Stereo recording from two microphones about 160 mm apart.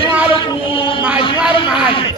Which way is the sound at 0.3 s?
30° left (ahead or behind).